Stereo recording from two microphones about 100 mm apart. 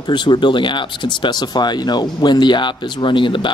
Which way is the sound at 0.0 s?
50° left (ahead or behind).